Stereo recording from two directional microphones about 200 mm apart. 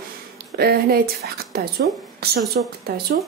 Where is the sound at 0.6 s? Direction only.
50° right (ahead or behind).